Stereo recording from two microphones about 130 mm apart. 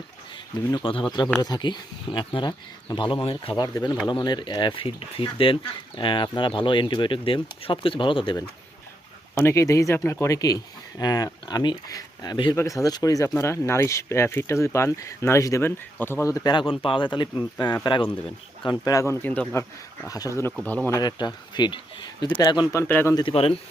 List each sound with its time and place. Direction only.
0.5 s speech: 30° left (ahead or behind)
9.3 s speech: 20° left (ahead or behind)
20.1 s speech: 25° left (ahead or behind)
20.7 s speech: 15° left (ahead or behind)
21.0 s speech: 35° left (ahead or behind)
22.8 s speech: 15° left (ahead or behind)
23.3 s a man's voice: 45° left (ahead or behind)